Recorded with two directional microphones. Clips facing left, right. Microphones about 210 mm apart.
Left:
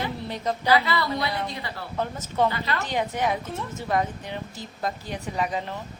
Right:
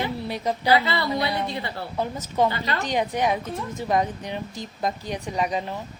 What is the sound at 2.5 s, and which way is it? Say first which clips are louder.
Speech: right 1 dB; 30° right (ahead or behind).